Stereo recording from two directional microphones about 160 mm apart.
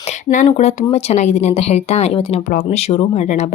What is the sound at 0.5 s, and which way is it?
Speech, 45° left (ahead or behind).